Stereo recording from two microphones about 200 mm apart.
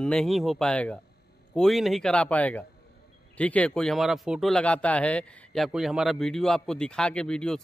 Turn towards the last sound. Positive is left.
turn(degrees=5)  # may be behind; listen again after turning